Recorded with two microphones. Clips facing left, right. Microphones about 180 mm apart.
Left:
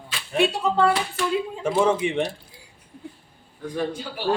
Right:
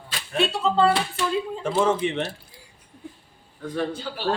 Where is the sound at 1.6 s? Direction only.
10° left (ahead or behind).